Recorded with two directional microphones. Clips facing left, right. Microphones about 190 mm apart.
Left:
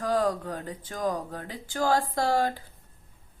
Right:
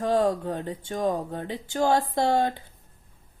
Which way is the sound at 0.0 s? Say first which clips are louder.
Right 3 dB; 25° right (ahead or behind).